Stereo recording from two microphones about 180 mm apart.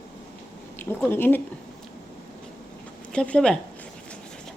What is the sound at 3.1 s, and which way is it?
Speech, 5° left (ahead or behind).